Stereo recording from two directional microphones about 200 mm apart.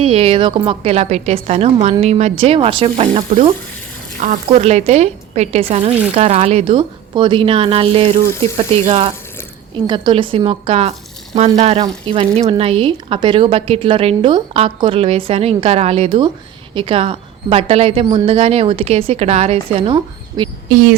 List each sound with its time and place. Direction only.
0.0 s a woman's voice: 30° right (ahead or behind)